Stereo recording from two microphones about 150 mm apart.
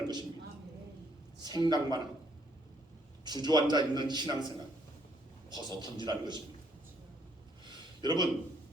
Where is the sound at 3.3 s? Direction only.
30° right (ahead or behind).